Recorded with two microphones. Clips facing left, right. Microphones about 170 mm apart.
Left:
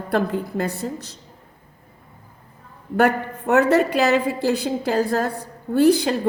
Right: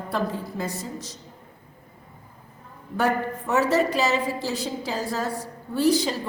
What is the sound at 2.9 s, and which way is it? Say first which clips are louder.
A woman's voice: left 5 dB; 60° left (ahead or behind).